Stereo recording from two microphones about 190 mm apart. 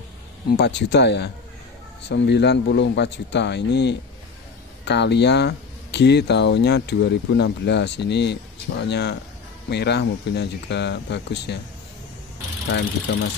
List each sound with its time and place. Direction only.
0.5 s speech: 60° left (ahead or behind)